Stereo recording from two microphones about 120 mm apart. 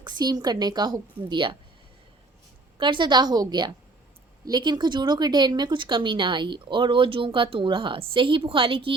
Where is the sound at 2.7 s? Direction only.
40° right (ahead or behind).